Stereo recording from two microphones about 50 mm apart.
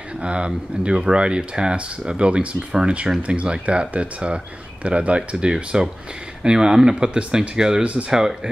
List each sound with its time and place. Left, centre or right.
0.2 s speech: right